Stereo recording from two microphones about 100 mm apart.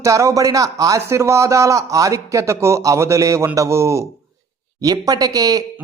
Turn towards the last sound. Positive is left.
turn(degrees=-40)  # may be behind; listen again after turning